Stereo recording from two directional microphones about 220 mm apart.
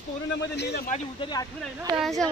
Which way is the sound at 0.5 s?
50° left (ahead or behind).